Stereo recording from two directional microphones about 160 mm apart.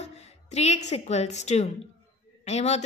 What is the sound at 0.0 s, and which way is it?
A woman's voice, 45° left (ahead or behind).